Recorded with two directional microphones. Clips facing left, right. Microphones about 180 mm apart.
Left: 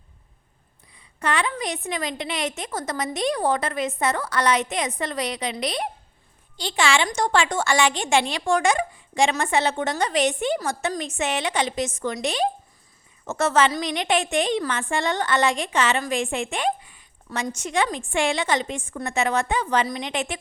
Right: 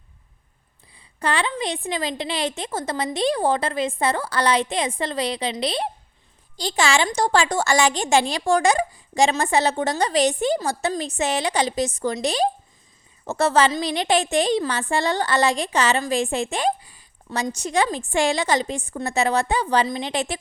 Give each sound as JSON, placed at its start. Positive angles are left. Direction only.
{"t": 0.9, "sound": "a woman's voice", "side_deg": -30}